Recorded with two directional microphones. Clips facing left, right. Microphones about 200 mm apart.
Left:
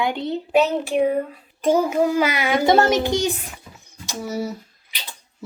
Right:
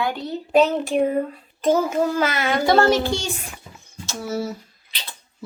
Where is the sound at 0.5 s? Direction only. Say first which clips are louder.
Right 1 dB; 5° left (ahead or behind).